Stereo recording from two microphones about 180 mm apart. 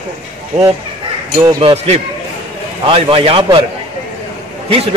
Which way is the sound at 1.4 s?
25° right (ahead or behind).